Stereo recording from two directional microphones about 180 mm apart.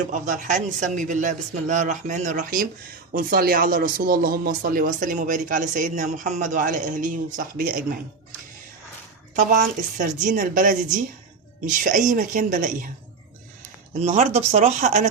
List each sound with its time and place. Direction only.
0.1 s speech: 45° right (ahead or behind)
9.3 s speech: 45° right (ahead or behind)
14.0 s speech: 40° right (ahead or behind)